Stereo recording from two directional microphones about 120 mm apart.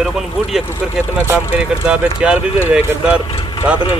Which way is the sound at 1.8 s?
10° right (ahead or behind).